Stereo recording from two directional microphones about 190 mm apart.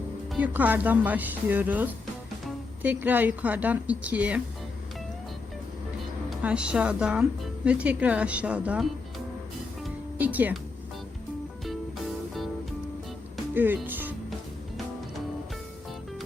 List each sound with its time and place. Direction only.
0.3 s speech: 10° right (ahead or behind)
6.3 s speech: 5° right (ahead or behind)
9.8 s music: 10° right (ahead or behind)
11.6 s music: centre (ahead or behind)
13.5 s music: 10° right (ahead or behind)